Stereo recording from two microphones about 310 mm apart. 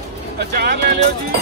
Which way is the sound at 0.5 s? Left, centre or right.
Right.